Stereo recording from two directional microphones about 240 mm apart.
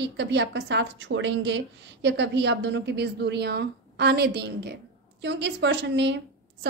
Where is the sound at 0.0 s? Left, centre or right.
Right.